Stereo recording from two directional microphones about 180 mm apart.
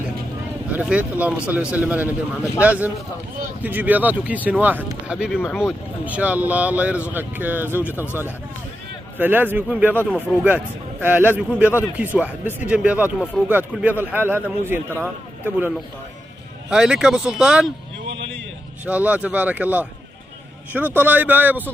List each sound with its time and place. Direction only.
0.7 s speech: 10° right (ahead or behind)
7.9 s speech: 15° left (ahead or behind)
9.2 s speech: 10° right (ahead or behind)
16.7 s speech: 5° right (ahead or behind)
18.1 s a sound: 90° right
18.9 s speech: 10° right (ahead or behind)